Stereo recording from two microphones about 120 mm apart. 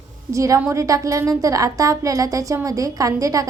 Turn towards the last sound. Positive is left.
turn(degrees=-30)  # may be behind; listen again after turning